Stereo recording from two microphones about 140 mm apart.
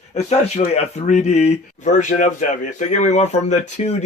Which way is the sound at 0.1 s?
50° left (ahead or behind).